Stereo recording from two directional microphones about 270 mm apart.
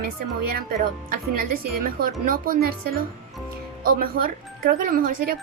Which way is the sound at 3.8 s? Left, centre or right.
Right.